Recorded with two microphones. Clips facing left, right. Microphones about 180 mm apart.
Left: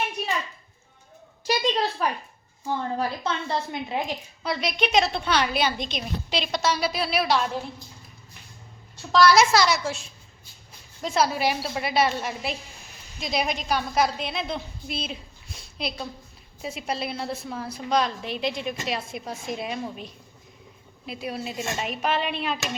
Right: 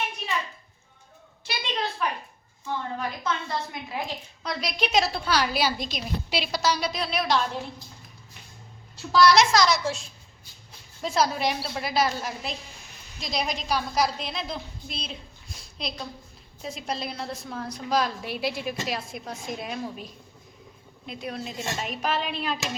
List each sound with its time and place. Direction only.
2.0 s a child's voice: 40° left (ahead or behind); by 4.1 s 25° left (ahead or behind)
4.4 s a woman's voice: centre (ahead or behind)
9.1 s a woman's voice: 5° left (ahead or behind)
11.0 s a woman's voice: centre (ahead or behind)
21.1 s a woman's voice: 5° left (ahead or behind)